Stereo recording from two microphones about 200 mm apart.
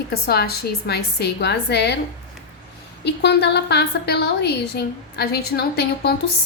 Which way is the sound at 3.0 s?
55° left (ahead or behind).